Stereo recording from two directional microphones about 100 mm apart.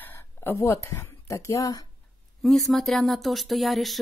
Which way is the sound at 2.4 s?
Centre (ahead or behind).